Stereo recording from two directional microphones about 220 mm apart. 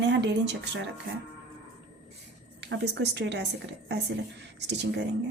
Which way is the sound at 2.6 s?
50° right (ahead or behind).